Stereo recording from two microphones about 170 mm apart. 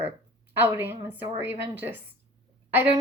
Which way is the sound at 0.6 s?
10° right (ahead or behind).